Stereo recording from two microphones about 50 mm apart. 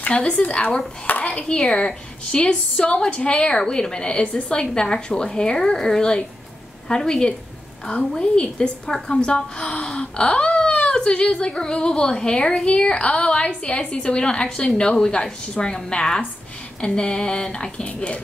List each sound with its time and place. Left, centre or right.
0.0 s a woman's voice: left
1.0 s a woman's voice: left